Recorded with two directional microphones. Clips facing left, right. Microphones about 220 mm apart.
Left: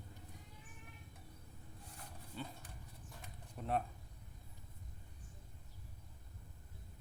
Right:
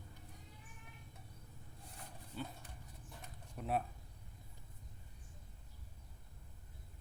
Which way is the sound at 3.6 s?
5° right (ahead or behind).